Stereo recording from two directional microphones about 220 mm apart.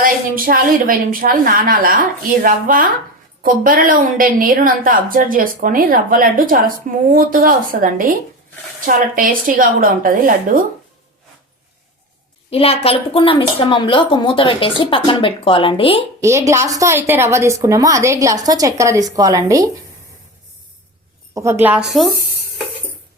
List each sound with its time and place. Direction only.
0.0 s a woman's voice: 40° right (ahead or behind)
12.5 s a woman's voice: 25° left (ahead or behind)
16.2 s a woman's voice: 15° right (ahead or behind)
21.3 s a woman's voice: 10° right (ahead or behind)